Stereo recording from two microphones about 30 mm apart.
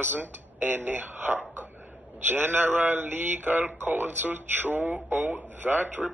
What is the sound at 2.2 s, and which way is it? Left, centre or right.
Speech, right.